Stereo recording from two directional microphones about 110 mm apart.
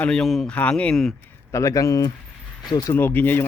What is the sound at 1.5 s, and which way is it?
Speech, 30° left (ahead or behind).